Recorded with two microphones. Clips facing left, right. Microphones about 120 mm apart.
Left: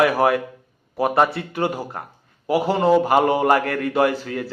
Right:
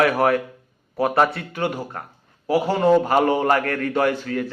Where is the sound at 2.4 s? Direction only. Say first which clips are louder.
Even; centre (ahead or behind).